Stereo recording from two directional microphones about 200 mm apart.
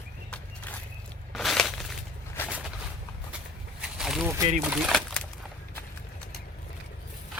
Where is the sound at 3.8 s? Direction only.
Centre (ahead or behind).